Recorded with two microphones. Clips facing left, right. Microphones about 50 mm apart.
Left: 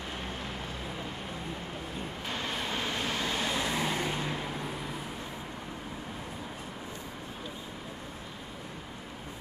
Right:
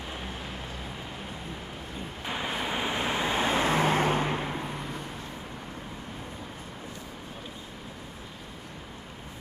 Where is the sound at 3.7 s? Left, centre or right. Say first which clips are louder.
Right 7 dB; right.